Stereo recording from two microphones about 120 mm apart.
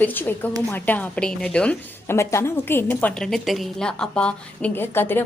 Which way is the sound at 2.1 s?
20° left (ahead or behind).